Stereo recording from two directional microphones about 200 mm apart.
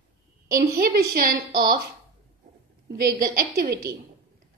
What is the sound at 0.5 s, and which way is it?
Speech, 45° right (ahead or behind).